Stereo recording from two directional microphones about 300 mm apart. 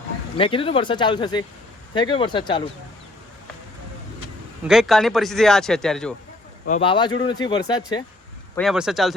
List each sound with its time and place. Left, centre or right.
0.3 s speech: centre
4.7 s speech: centre
6.7 s speech: centre
8.5 s speech: centre